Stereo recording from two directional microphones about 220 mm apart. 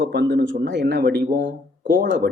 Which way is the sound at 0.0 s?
50° right (ahead or behind).